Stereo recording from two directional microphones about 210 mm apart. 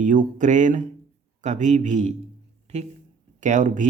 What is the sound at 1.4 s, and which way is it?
Speech, 35° right (ahead or behind).